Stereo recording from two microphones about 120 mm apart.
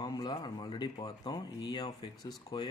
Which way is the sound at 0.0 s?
35° left (ahead or behind).